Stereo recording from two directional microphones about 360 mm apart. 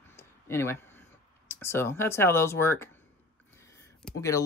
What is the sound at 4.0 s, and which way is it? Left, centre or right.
Speech, centre.